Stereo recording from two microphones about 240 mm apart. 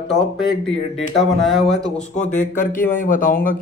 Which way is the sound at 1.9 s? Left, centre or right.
Left.